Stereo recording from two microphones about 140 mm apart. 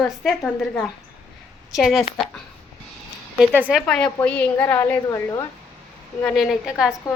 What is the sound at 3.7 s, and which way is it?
A woman's voice, 5° left (ahead or behind).